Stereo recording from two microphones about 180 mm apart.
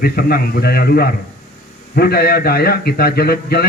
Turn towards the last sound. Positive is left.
turn(degrees=60)  # may be behind; listen again after turning